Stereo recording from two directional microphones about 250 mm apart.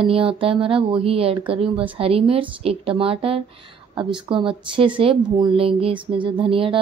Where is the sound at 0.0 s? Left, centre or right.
Right.